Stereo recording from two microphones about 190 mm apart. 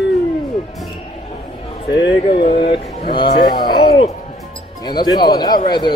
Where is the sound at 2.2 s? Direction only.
35° left (ahead or behind).